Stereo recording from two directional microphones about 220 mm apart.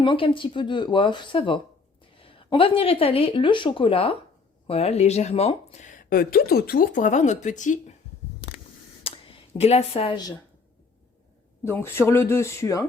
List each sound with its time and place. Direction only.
0.0 s speech: 20° left (ahead or behind)
9.0 s a sound: 25° left (ahead or behind)
11.6 s speech: 10° left (ahead or behind)